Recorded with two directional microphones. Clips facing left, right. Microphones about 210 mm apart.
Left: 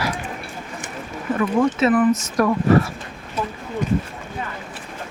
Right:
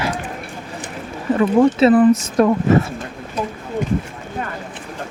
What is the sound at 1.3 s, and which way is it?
Speech, 30° right (ahead or behind).